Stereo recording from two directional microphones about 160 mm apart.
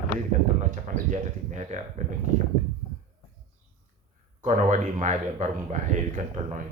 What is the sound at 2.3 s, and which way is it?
Speech, 50° right (ahead or behind).